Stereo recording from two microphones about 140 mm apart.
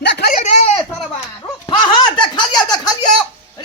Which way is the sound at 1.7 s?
35° left (ahead or behind).